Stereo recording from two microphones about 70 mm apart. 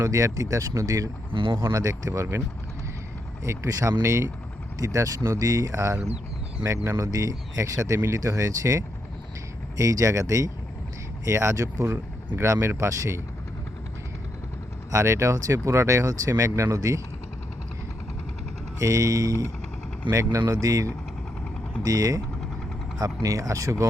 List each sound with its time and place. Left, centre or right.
0.0 s speech: right
3.4 s speech: right
7.0 s speech: right
12.4 s speech: right
14.8 s speech: right
18.8 s speech: right
23.2 s speech: right